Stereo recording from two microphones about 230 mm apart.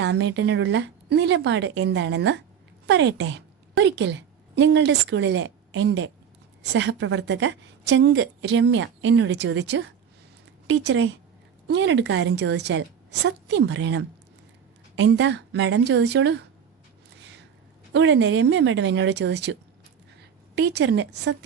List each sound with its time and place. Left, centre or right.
0.0 s a woman's voice: right
17.2 s a sound: right
17.9 s a woman's voice: right
20.6 s a woman's voice: right